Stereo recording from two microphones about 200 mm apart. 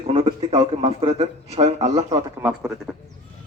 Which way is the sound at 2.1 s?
10° right (ahead or behind).